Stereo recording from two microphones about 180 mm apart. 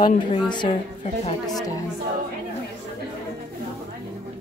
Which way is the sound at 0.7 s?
35° left (ahead or behind).